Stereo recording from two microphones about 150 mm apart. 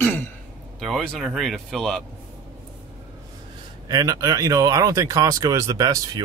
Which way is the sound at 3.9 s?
25° right (ahead or behind).